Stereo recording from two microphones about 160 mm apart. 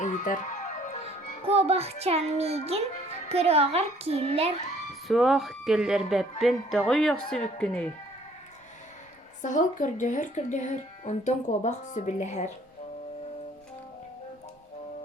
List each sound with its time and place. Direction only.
0.0 s music: 50° left (ahead or behind)
1.5 s a woman's voice: 40° right (ahead or behind)
5.0 s speech: centre (ahead or behind)
9.4 s speech: 55° left (ahead or behind)